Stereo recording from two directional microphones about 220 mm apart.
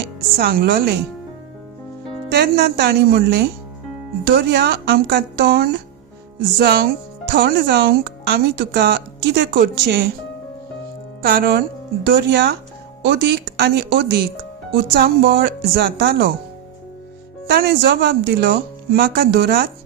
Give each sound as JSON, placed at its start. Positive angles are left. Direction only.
{"t": 0.0, "sound": "speech", "side_deg": -45}
{"t": 2.3, "sound": "speech", "side_deg": -50}
{"t": 11.2, "sound": "speech", "side_deg": -45}
{"t": 17.4, "sound": "speech", "side_deg": -45}